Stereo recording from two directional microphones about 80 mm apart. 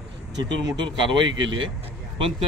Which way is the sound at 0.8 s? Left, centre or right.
Right.